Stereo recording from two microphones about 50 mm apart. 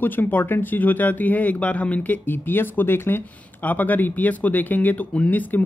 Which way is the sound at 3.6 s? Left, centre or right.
Left.